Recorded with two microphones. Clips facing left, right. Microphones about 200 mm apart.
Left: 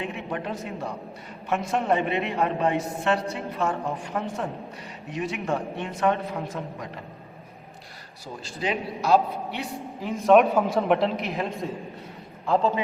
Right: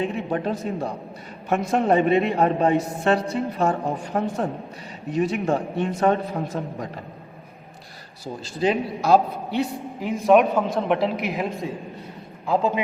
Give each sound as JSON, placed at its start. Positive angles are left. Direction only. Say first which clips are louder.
{"t": 0.3, "sound": "a man's voice", "louder": "right 6 dB", "side_deg": -35}
{"t": 8.6, "sound": "a man's voice", "louder": "right 5 dB", "side_deg": -40}
{"t": 10.0, "sound": "a man's voice", "louder": "right 2 dB", "side_deg": -15}
{"t": 10.3, "sound": "a man's voice", "louder": "even", "side_deg": 0}